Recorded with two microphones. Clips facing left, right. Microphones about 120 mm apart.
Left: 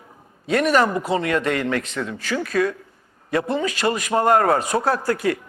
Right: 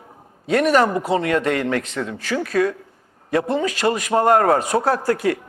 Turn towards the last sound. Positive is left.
turn(degrees=-45)  # may be behind; listen again after turning